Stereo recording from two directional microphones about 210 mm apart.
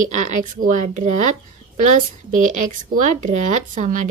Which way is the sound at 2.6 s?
35° right (ahead or behind).